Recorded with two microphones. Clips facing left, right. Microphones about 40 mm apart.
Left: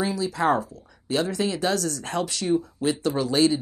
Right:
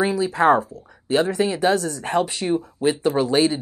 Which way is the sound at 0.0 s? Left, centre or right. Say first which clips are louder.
Right 6 dB; right.